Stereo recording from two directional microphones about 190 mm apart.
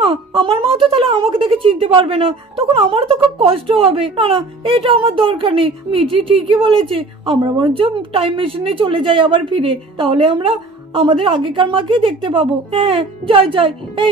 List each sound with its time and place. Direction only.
0.0 s a woman's voice: 30° right (ahead or behind)